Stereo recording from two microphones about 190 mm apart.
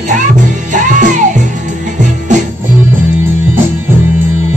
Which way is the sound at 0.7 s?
40° right (ahead or behind).